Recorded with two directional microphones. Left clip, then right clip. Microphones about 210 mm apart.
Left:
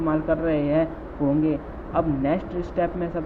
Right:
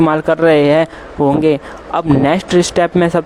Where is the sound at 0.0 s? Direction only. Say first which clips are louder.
Right 12 dB; 60° right (ahead or behind).